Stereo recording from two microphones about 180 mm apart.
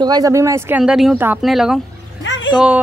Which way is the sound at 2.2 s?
90° left.